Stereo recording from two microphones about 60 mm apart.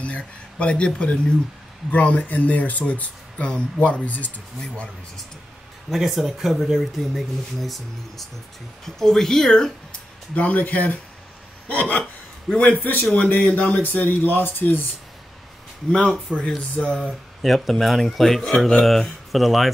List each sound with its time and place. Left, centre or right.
0.0 s speech: left
5.9 s speech: centre
10.3 s speech: left
15.9 s speech: centre
17.4 s speech: centre